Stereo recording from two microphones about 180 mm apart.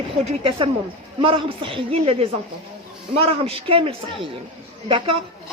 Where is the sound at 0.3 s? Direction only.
30° right (ahead or behind).